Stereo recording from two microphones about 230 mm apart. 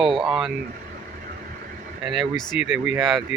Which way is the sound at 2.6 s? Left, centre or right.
Centre.